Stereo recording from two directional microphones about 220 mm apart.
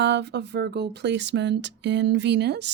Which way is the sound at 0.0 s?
50° right (ahead or behind).